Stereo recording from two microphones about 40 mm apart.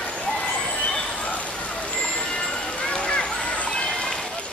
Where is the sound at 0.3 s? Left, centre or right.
Left.